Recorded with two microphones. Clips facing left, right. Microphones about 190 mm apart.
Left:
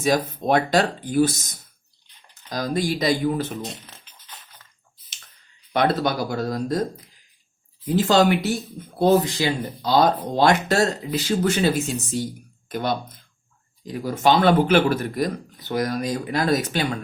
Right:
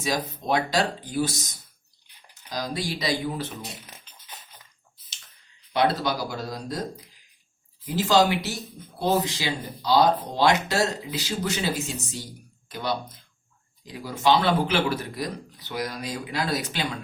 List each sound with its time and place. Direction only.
0.0 s speech: 50° left (ahead or behind)
2.5 s speech: 50° left (ahead or behind)
5.7 s speech: 55° left (ahead or behind)
7.9 s speech: 55° left (ahead or behind)